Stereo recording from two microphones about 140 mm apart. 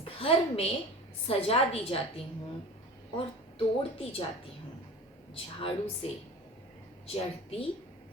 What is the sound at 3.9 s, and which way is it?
Speech, 40° left (ahead or behind).